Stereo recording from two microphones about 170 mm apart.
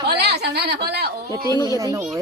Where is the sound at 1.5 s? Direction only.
20° left (ahead or behind).